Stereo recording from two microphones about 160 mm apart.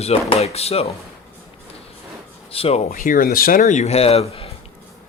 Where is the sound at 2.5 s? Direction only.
35° left (ahead or behind).